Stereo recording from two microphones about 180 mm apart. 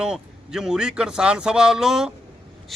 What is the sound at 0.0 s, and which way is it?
A man's voice, 5° right (ahead or behind).